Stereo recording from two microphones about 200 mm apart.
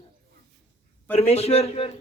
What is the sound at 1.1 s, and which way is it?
Speech, 30° left (ahead or behind).